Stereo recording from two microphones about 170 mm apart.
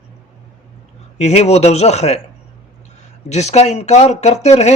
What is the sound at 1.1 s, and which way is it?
A man's voice, 40° left (ahead or behind).